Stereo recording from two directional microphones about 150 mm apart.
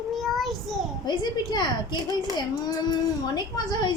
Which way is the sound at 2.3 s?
25° left (ahead or behind).